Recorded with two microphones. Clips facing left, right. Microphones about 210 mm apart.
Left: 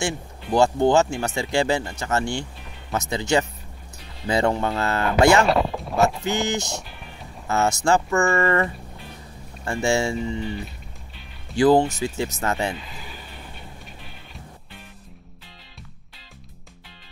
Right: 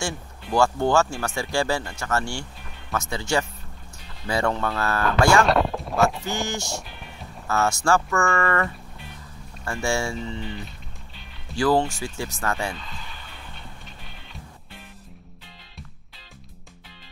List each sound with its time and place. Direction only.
0.0 s speech: 20° left (ahead or behind)
5.4 s a sound: centre (ahead or behind)
6.2 s speech: 20° left (ahead or behind)
11.5 s speech: 20° left (ahead or behind)